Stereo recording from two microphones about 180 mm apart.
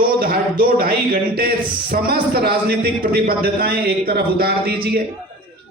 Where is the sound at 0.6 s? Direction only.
55° right (ahead or behind).